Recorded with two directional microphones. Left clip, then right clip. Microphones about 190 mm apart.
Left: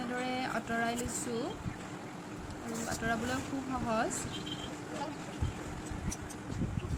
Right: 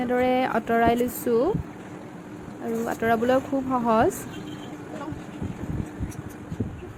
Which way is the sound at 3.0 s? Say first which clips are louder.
Right 14 dB; 40° right (ahead or behind).